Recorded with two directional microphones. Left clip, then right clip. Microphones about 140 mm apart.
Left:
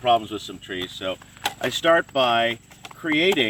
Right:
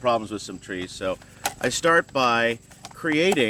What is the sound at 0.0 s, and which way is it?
Speech, 50° right (ahead or behind).